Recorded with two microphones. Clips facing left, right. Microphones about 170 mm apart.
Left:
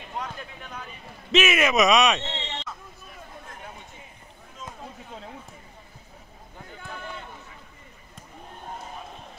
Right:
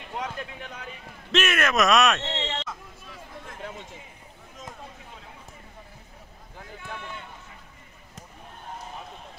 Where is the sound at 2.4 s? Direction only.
90° right.